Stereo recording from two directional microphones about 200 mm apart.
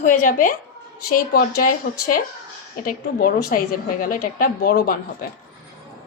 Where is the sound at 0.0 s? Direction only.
40° left (ahead or behind).